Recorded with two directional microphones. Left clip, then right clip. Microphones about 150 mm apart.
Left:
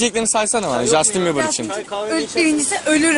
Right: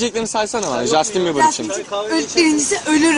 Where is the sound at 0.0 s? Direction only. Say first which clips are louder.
Left 1 dB; 65° left (ahead or behind).